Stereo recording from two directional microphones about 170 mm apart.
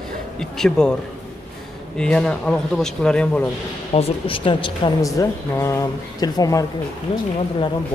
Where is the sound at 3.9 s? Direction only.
35° left (ahead or behind).